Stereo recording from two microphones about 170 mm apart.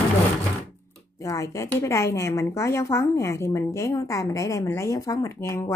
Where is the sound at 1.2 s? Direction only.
20° left (ahead or behind).